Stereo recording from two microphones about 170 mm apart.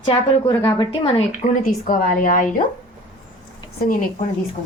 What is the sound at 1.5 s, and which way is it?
A woman's voice, 50° left (ahead or behind).